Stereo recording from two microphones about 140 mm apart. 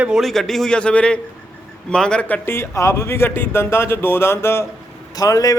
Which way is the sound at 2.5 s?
20° left (ahead or behind).